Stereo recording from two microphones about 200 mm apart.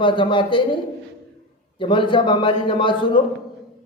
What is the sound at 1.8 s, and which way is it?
A man's voice, 25° left (ahead or behind).